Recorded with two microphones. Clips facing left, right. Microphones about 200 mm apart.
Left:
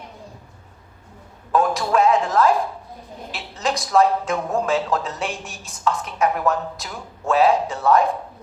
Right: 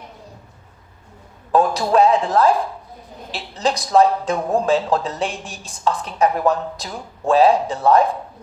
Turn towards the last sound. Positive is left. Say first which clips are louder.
# right 2 dB
turn(degrees=-35)  # may be behind; listen again after turning